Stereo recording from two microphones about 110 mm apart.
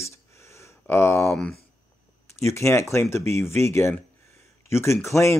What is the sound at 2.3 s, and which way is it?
Speech, 25° left (ahead or behind).